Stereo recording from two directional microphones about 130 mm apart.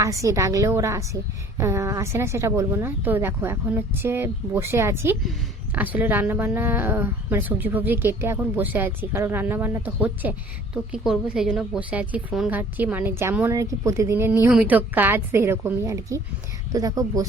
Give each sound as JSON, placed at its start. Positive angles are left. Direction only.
{"t": 0.0, "sound": "a woman's voice", "side_deg": -25}